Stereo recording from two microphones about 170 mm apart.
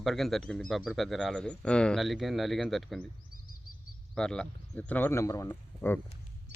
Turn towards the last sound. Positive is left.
turn(degrees=10)  # may be behind; listen again after turning